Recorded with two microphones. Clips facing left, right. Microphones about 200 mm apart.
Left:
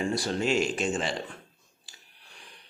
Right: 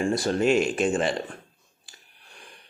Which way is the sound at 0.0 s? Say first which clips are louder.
Right 5 dB; 50° right (ahead or behind).